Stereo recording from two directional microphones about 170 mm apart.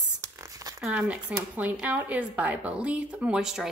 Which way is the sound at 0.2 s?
15° right (ahead or behind).